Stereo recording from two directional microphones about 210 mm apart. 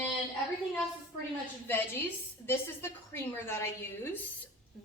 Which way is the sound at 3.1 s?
10° left (ahead or behind).